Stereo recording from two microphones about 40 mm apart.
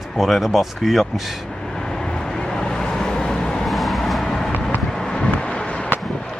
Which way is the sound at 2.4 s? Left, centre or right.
Centre.